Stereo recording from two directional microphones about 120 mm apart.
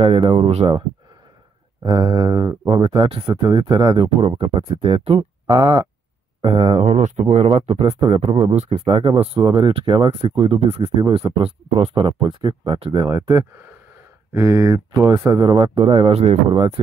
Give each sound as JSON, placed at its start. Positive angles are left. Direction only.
{"t": 0.0, "sound": "speech", "side_deg": -50}
{"t": 1.9, "sound": "speech", "side_deg": -35}
{"t": 5.5, "sound": "speech", "side_deg": -40}
{"t": 6.4, "sound": "speech", "side_deg": -50}
{"t": 7.8, "sound": "speech", "side_deg": -45}
{"t": 9.4, "sound": "speech", "side_deg": -35}
{"t": 10.3, "sound": "speech", "side_deg": -55}
{"t": 13.1, "sound": "speech", "side_deg": -30}
{"t": 15.4, "sound": "speech", "side_deg": -40}
{"t": 16.5, "sound": "speech", "side_deg": -45}